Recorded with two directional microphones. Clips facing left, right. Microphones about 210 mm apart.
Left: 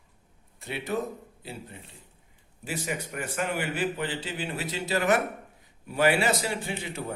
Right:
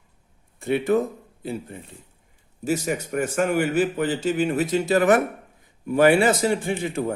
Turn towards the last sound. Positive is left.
turn(degrees=-50)  # may be behind; listen again after turning